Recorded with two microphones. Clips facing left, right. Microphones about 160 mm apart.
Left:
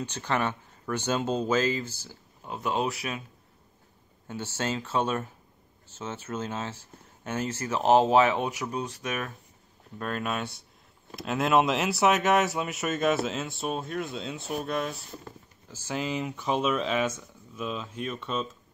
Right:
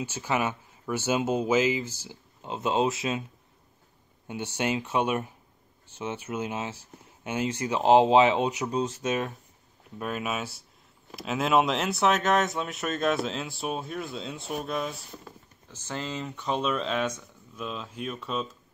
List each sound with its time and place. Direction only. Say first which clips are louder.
0.0 s speech: right 1 dB; 5° right (ahead or behind)
2.0 s speech: right 3 dB; 20° right (ahead or behind)
4.3 s speech: right 2 dB; 15° right (ahead or behind)
9.9 s speech: even; 10° right (ahead or behind)